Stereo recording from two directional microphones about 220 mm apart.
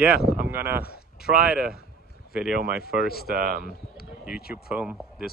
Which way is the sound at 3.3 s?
40° right (ahead or behind).